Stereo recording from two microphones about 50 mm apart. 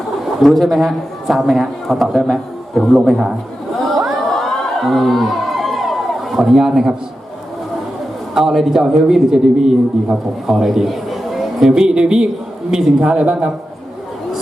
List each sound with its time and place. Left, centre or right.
0.4 s a man's voice: centre
4.4 s crowd: centre
8.4 s a man's voice: centre
11.7 s a man's voice: centre